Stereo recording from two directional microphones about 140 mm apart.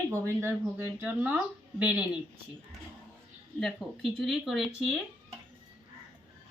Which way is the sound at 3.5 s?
Centre (ahead or behind).